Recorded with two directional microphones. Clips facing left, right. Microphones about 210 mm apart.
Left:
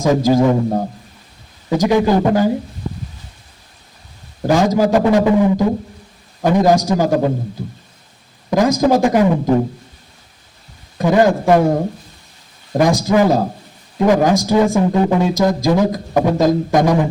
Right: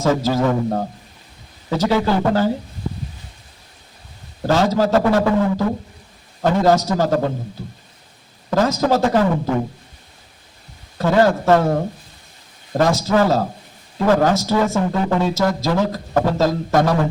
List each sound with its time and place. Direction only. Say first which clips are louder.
0.0 s speech: left 4 dB; 15° left (ahead or behind)
4.4 s speech: left 3 dB; 15° left (ahead or behind)
8.4 s speech: left 4 dB; 15° left (ahead or behind)
10.9 s speech: left 2 dB; 15° left (ahead or behind)
12.7 s speech: left 3 dB; 15° left (ahead or behind)